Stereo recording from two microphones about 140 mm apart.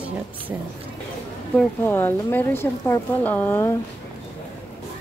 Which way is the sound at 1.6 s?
15° left (ahead or behind).